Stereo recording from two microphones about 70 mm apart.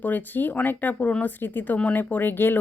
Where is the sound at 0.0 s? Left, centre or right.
Left.